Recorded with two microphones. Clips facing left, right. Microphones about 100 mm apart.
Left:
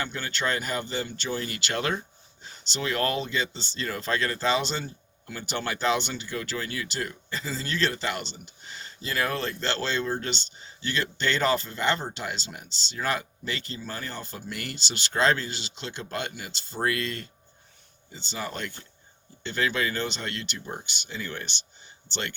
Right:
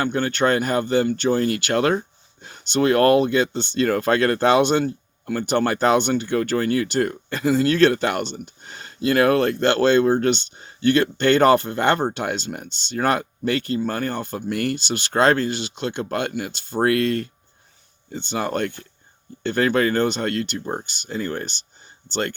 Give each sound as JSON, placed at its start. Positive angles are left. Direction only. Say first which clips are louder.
{"t": 0.0, "sound": "speech", "louder": "right 10 dB", "side_deg": -55}